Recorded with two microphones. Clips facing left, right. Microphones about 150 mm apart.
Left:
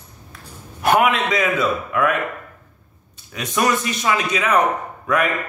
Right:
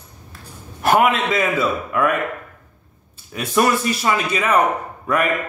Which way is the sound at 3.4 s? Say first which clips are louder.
Right 2 dB; 5° right (ahead or behind).